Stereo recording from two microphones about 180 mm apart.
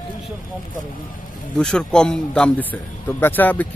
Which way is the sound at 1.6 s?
5° left (ahead or behind).